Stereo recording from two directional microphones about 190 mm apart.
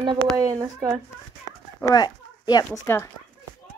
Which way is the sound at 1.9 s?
20° left (ahead or behind).